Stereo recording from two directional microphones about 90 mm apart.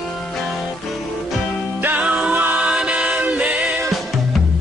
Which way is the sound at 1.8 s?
20° right (ahead or behind).